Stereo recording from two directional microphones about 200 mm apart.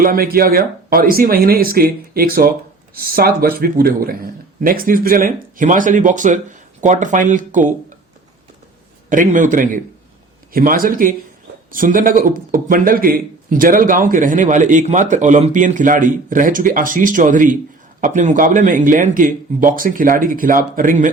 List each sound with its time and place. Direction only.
0.0 s speech: 45° right (ahead or behind)
9.0 s speech: 40° right (ahead or behind)